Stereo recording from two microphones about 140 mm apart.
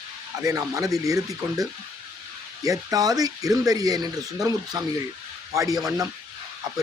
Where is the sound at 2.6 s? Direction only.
25° right (ahead or behind).